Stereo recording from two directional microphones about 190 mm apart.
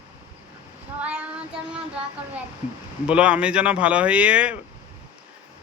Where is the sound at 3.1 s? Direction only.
5° right (ahead or behind).